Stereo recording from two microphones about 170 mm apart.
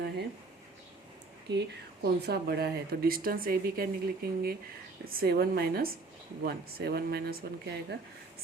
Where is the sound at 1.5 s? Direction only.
75° right (ahead or behind); by 3.9 s 60° right (ahead or behind).